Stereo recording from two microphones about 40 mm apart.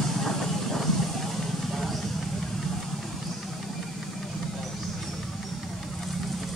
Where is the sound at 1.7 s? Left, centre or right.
Centre.